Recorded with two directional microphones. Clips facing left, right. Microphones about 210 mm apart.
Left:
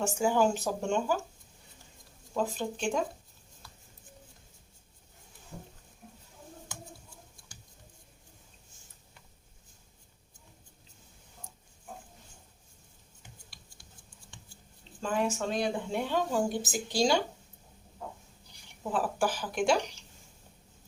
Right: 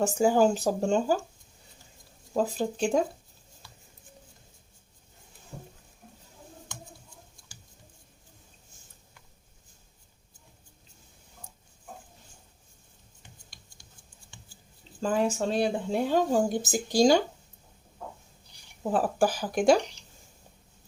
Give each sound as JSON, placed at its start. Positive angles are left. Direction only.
{"t": 0.0, "sound": "speech", "side_deg": -35}
{"t": 2.3, "sound": "speech", "side_deg": -35}
{"t": 3.6, "sound": "a sound", "side_deg": 0}
{"t": 15.0, "sound": "speech", "side_deg": -35}
{"t": 18.8, "sound": "speech", "side_deg": -40}